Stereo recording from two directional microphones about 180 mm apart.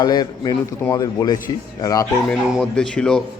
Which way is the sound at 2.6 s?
5° left (ahead or behind).